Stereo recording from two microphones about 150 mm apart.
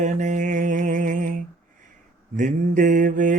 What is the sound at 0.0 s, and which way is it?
Mantra, 55° right (ahead or behind).